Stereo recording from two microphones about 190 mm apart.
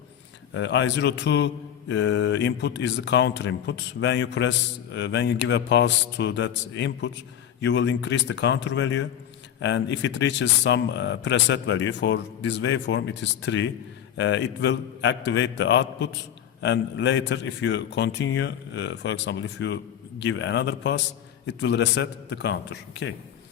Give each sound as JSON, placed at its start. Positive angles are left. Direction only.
{"t": 0.5, "sound": "a man's voice", "side_deg": 65}